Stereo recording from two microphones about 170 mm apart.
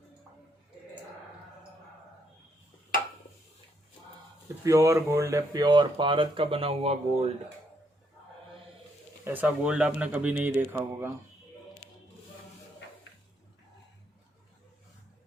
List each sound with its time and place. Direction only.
4.6 s speech: 20° right (ahead or behind); by 7.3 s 35° right (ahead or behind)
9.2 s speech: 10° right (ahead or behind)